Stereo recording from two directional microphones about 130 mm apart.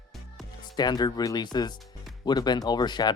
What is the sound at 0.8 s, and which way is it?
Speech, 30° left (ahead or behind).